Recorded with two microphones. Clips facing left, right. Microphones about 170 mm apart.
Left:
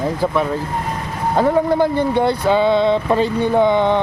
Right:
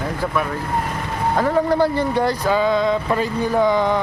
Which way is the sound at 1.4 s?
20° left (ahead or behind).